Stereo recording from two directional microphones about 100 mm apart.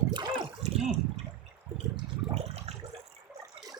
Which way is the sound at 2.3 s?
90° right.